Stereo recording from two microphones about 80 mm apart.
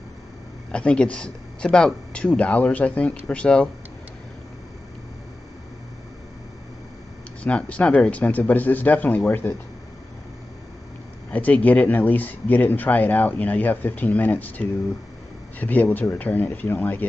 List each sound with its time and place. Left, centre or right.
0.7 s speech: centre
7.4 s speech: centre
11.3 s speech: centre